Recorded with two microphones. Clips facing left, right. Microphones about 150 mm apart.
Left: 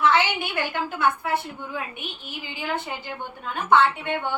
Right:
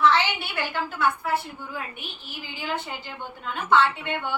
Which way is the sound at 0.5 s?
15° left (ahead or behind).